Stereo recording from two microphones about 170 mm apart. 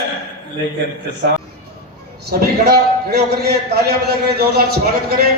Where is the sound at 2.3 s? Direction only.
60° right (ahead or behind).